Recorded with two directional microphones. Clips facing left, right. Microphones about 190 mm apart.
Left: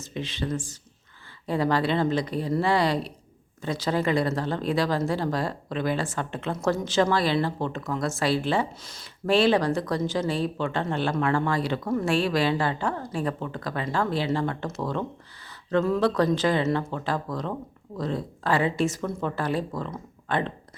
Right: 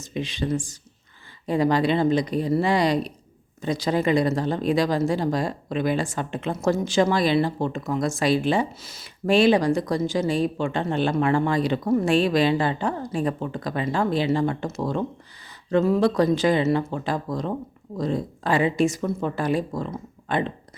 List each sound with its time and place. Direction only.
0.0 s speech: 15° right (ahead or behind)